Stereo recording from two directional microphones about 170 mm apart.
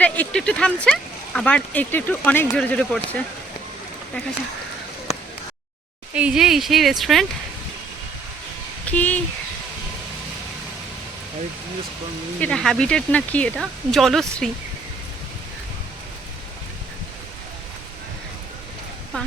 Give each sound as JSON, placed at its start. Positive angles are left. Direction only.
{"t": 0.0, "sound": "speech", "side_deg": 10}
{"t": 5.1, "sound": "a sound", "side_deg": 40}
{"t": 6.1, "sound": "speech", "side_deg": -5}
{"t": 8.9, "sound": "speech", "side_deg": 10}
{"t": 12.4, "sound": "speech", "side_deg": 5}